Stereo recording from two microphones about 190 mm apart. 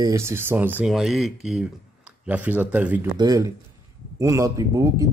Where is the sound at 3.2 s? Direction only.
20° right (ahead or behind).